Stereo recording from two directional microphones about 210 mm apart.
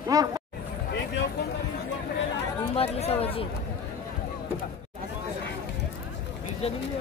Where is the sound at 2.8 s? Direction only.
30° left (ahead or behind).